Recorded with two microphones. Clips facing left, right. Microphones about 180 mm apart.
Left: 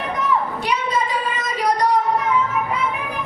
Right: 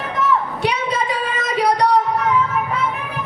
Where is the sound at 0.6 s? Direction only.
70° right (ahead or behind).